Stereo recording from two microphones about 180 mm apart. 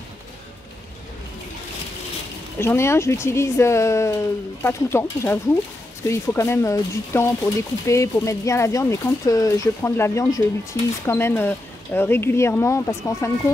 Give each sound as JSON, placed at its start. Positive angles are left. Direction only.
{"t": 2.6, "sound": "speech", "side_deg": 15}